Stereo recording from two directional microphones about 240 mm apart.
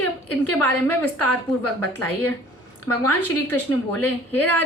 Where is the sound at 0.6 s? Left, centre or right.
Centre.